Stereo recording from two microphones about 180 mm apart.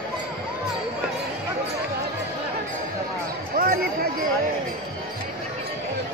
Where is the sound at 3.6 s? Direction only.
55° right (ahead or behind).